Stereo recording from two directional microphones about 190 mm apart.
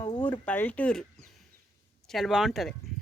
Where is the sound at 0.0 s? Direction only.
30° left (ahead or behind).